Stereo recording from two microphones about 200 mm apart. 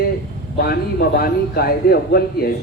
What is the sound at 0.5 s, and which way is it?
A man's voice, 50° left (ahead or behind).